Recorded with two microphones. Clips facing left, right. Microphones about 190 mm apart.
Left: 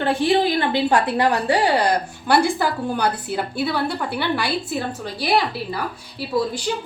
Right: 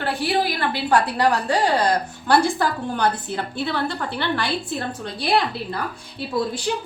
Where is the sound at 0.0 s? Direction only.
20° left (ahead or behind); by 5.8 s 5° left (ahead or behind).